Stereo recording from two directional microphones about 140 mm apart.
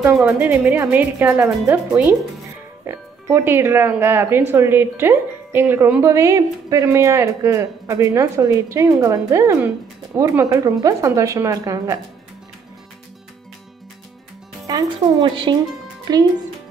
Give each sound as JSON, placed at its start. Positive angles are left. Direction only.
{"t": 0.1, "sound": "a woman's voice", "side_deg": -5}
{"t": 14.7, "sound": "speech", "side_deg": -25}